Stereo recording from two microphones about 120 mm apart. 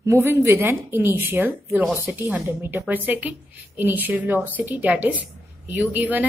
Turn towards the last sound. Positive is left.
turn(degrees=-15)  # may be behind; listen again after turning